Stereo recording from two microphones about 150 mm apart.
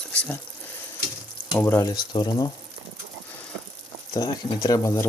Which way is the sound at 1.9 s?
30° left (ahead or behind).